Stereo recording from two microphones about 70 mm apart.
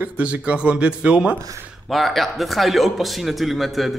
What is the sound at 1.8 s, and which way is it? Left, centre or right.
Speech, centre.